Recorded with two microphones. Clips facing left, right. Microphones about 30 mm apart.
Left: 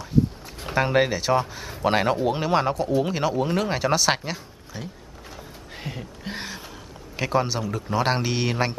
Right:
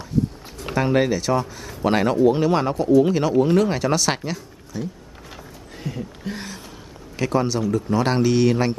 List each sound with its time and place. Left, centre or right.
0.7 s a man's voice: centre
4.7 s speech: left
5.8 s a sound: left
7.2 s a man's voice: centre